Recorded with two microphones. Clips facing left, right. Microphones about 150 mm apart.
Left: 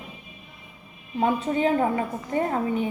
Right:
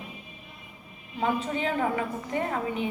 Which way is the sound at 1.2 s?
40° left (ahead or behind).